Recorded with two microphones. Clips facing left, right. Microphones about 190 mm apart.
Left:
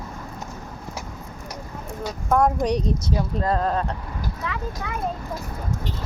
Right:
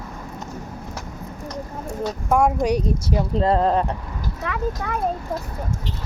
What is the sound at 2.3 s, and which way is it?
Speech, 5° right (ahead or behind).